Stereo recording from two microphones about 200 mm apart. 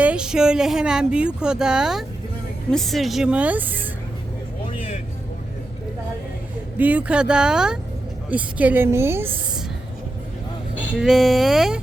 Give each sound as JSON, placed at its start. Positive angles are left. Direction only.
{"t": 0.0, "sound": "speech", "side_deg": -5}
{"t": 6.7, "sound": "a woman's voice", "side_deg": -10}
{"t": 10.8, "sound": "speech", "side_deg": 0}